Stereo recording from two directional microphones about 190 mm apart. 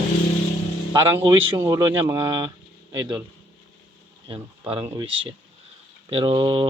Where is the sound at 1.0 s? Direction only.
25° right (ahead or behind).